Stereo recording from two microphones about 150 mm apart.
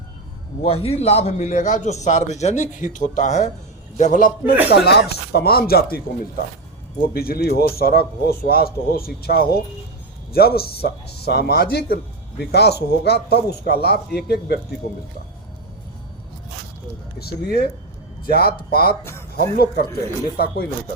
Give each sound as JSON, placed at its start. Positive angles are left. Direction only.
{"t": 0.6, "sound": "a man's voice", "side_deg": 40}
{"t": 4.7, "sound": "a man's voice", "side_deg": 90}
{"t": 7.0, "sound": "a man's voice", "side_deg": 90}
{"t": 17.2, "sound": "a man's voice", "side_deg": 90}